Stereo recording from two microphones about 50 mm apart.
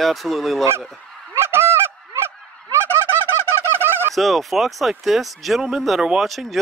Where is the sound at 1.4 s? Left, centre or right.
Right.